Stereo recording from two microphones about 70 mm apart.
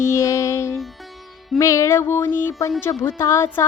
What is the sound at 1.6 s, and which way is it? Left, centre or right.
Music, left.